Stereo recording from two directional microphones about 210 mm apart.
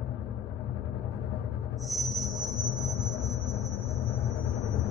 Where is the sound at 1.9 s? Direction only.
Centre (ahead or behind).